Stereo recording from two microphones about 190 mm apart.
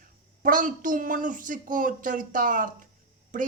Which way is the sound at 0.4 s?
45° right (ahead or behind).